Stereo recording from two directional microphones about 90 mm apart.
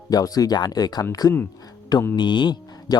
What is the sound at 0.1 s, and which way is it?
Speech, 45° left (ahead or behind).